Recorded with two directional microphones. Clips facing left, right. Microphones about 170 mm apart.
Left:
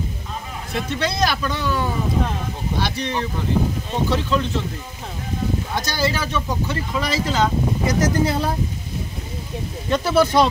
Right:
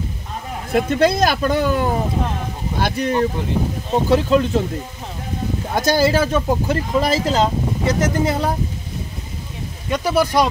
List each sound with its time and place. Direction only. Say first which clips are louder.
0.7 s speech: right 9 dB; 50° right (ahead or behind)
5.8 s speech: right 10 dB; 50° right (ahead or behind)
7.8 s speech: right 2 dB; 25° right (ahead or behind)
9.8 s speech: even; 15° right (ahead or behind)